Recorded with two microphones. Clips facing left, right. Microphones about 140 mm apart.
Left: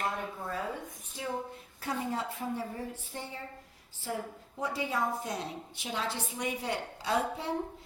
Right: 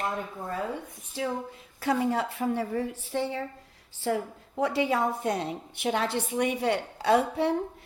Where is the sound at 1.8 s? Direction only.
90° right.